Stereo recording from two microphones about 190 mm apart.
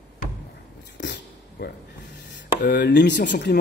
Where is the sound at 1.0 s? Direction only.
70° left (ahead or behind).